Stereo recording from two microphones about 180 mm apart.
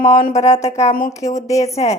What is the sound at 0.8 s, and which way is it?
Speech, 50° left (ahead or behind).